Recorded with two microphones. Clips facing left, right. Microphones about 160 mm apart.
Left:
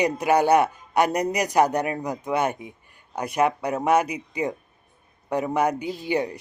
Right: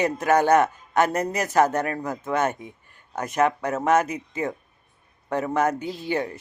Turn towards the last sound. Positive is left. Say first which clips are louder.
# left 2 dB
turn(degrees=15)  # may be behind; listen again after turning